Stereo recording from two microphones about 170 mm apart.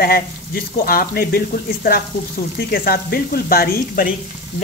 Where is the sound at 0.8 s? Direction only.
60° left (ahead or behind).